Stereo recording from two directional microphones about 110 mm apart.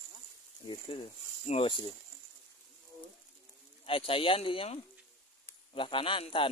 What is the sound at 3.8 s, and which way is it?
Speech, 60° left (ahead or behind).